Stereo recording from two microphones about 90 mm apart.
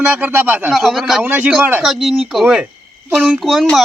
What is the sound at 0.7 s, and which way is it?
Speech, centre (ahead or behind).